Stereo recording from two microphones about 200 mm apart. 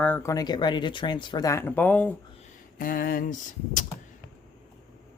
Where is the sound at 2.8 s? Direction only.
45° left (ahead or behind).